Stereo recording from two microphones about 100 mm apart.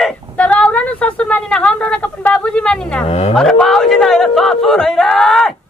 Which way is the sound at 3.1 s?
90° left.